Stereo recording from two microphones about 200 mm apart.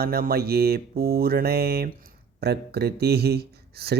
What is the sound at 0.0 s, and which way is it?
Mantra, 50° right (ahead or behind).